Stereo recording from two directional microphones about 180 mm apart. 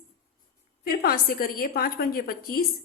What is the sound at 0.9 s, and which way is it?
A woman's voice, 55° left (ahead or behind).